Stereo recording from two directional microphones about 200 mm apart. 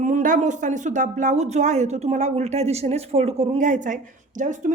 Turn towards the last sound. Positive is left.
turn(degrees=-40)  # may be behind; listen again after turning